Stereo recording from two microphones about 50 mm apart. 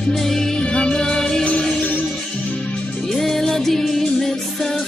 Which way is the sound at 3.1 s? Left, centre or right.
Centre.